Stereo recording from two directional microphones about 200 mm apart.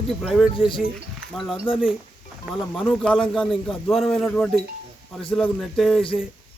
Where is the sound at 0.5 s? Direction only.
25° left (ahead or behind).